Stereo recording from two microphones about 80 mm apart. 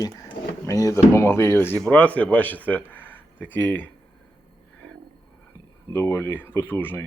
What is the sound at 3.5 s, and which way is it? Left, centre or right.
Speech, left.